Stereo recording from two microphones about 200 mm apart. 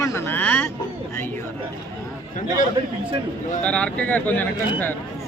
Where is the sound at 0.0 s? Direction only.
10° left (ahead or behind).